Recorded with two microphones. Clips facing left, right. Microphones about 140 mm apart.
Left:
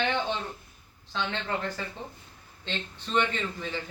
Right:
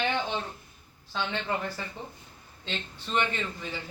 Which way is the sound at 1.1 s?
10° right (ahead or behind).